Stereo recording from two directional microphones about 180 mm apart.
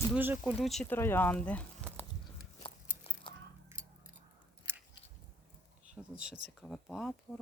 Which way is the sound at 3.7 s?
15° right (ahead or behind).